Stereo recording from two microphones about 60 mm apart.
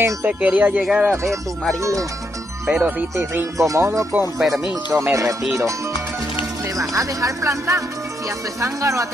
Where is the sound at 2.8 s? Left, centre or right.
Right.